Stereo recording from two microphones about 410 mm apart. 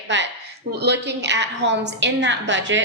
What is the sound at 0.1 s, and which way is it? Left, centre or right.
A woman's voice, right.